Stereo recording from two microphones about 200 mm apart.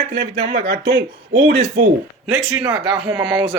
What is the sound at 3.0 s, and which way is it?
Speech, 25° right (ahead or behind).